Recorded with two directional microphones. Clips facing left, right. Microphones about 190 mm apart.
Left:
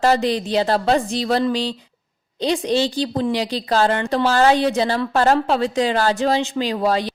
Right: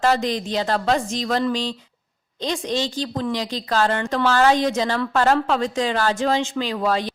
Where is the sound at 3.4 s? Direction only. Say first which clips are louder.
Left 3 dB; 35° left (ahead or behind).